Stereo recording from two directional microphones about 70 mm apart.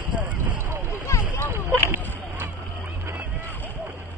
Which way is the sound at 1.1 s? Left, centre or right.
Left.